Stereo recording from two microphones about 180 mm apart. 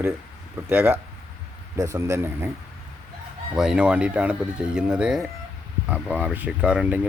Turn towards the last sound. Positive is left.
turn(degrees=-5)  # may be behind; listen again after turning